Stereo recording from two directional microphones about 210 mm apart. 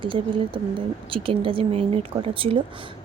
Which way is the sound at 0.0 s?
25° right (ahead or behind).